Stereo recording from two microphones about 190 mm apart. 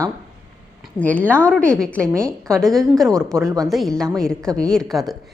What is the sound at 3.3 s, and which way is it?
Speech, 15° right (ahead or behind).